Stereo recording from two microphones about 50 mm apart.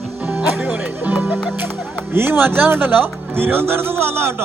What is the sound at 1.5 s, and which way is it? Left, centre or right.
A man's voice, right.